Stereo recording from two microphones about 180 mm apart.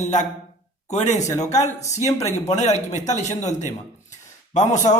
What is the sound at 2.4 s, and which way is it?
Speech, 40° left (ahead or behind).